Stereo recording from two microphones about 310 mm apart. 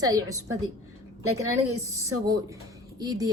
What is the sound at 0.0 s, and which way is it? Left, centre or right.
Speech, centre.